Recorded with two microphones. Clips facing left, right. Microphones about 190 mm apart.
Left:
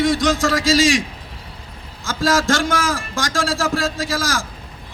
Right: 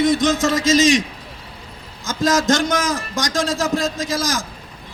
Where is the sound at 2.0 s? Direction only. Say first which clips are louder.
Even; 20° right (ahead or behind).